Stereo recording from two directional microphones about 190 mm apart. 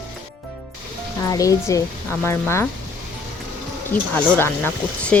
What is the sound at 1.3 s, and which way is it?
Speech, 20° left (ahead or behind).